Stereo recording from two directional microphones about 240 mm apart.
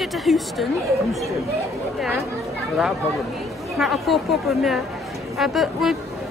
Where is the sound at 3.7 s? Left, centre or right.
Centre.